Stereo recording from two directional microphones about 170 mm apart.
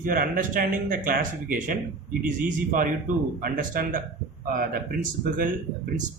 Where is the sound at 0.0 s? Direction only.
55° right (ahead or behind).